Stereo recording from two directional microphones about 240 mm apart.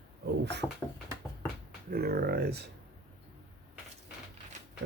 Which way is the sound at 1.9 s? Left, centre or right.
Right.